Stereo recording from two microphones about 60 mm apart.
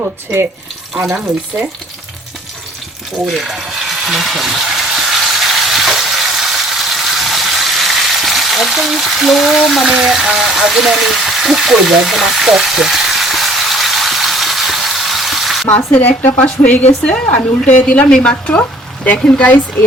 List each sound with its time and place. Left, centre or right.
3.2 s frying: centre
9.9 s a sound: centre
15.7 s speech: left
17.0 s a woman's voice: centre